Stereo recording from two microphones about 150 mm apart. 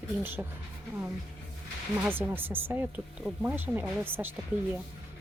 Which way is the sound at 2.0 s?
15° right (ahead or behind).